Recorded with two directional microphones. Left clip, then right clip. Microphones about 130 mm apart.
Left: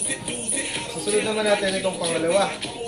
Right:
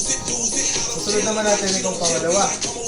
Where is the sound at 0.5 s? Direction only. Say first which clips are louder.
Right 5 dB; 40° right (ahead or behind).